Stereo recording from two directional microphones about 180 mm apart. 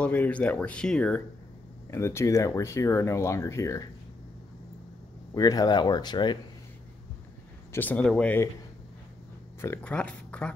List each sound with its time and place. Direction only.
0.0 s speech: 10° left (ahead or behind)
5.3 s speech: 20° left (ahead or behind)
7.7 s speech: 10° left (ahead or behind)
9.6 s a sound: 10° left (ahead or behind)